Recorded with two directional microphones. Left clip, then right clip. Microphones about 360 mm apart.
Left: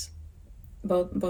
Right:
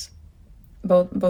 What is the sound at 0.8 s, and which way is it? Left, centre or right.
Speech, right.